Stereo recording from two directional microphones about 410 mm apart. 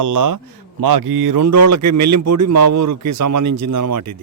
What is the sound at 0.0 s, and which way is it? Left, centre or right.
A man's voice, right.